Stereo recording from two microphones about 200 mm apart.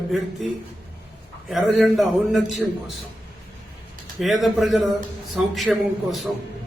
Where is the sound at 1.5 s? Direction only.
Centre (ahead or behind).